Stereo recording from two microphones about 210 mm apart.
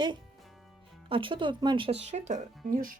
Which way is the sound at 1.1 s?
25° right (ahead or behind).